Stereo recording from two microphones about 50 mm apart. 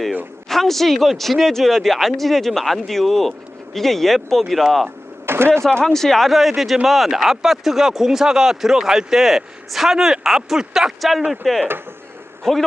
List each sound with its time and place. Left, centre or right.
0.4 s speech: centre
5.2 s a sound: right
5.8 s a man's voice: centre